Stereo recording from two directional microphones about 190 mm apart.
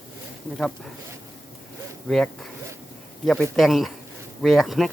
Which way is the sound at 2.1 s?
Centre (ahead or behind).